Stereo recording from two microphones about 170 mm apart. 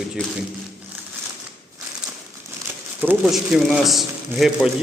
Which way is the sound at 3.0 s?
5° right (ahead or behind).